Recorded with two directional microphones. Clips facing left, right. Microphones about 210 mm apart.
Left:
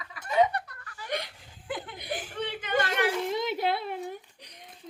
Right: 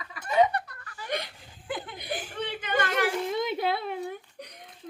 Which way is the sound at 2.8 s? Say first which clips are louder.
Right 1 dB; 45° right (ahead or behind).